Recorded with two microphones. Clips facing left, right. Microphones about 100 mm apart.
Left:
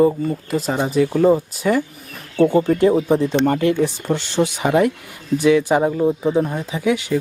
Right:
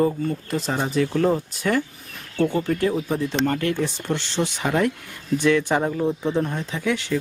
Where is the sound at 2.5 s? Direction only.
20° left (ahead or behind).